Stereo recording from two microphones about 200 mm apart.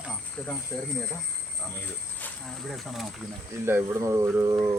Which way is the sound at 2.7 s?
Centre (ahead or behind).